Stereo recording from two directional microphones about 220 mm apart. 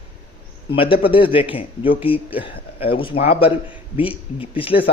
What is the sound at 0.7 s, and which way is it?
Speech, 25° left (ahead or behind).